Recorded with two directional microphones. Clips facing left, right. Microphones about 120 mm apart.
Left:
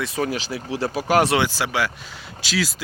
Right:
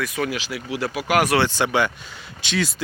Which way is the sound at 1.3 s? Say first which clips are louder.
Right 2 dB; 5° left (ahead or behind).